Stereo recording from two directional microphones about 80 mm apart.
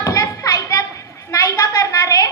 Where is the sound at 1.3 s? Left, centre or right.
Left.